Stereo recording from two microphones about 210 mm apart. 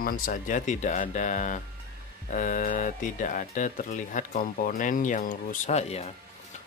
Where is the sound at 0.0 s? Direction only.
40° left (ahead or behind).